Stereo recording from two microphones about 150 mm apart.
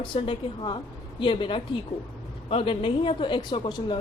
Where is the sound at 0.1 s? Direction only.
35° left (ahead or behind).